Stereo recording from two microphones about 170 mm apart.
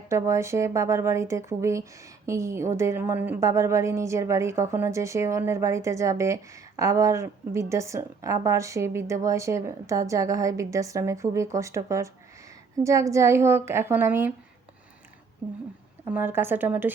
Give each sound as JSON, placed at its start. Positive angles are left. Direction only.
{"t": 0.1, "sound": "speech", "side_deg": -15}
{"t": 16.1, "sound": "speech", "side_deg": -10}